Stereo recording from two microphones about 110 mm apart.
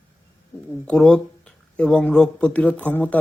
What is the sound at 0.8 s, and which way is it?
Speech, 5° left (ahead or behind).